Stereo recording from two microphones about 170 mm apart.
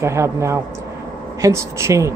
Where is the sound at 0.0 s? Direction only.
15° right (ahead or behind).